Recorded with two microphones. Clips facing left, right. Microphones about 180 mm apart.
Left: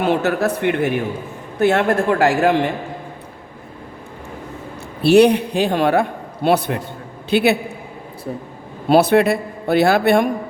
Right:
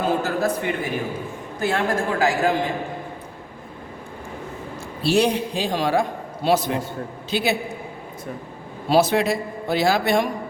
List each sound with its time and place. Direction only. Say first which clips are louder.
0.0 s a man's voice: left 4 dB; 70° left (ahead or behind)
5.0 s a man's voice: left 8 dB; 65° left (ahead or behind)
8.9 s a man's voice: left 5 dB; 60° left (ahead or behind)